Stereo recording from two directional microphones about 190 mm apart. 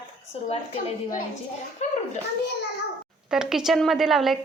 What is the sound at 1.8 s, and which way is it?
Speech, 35° left (ahead or behind).